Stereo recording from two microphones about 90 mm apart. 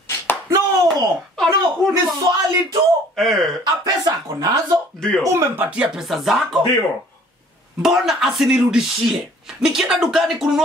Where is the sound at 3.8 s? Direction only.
45° right (ahead or behind).